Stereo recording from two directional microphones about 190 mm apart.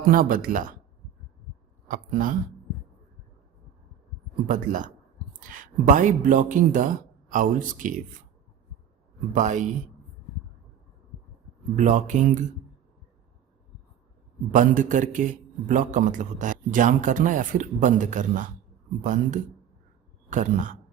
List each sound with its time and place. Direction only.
0.0 s a man's voice: 45° right (ahead or behind)
1.9 s speech: 45° right (ahead or behind)
4.4 s a man's voice: 45° right (ahead or behind)
5.4 s a sound: 45° right (ahead or behind)
5.8 s a man's voice: 45° right (ahead or behind)
9.3 s speech: 40° right (ahead or behind)
11.8 s speech: 40° right (ahead or behind)
14.5 s a man's voice: 45° right (ahead or behind)